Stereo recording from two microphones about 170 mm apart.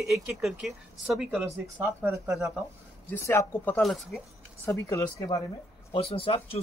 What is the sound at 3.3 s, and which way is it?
Speech, 15° left (ahead or behind).